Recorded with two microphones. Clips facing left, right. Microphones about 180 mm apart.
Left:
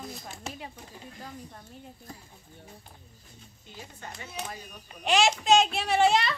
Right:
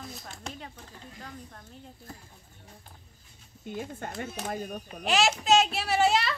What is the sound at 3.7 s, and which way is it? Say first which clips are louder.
Speech: right 9 dB; 55° right (ahead or behind).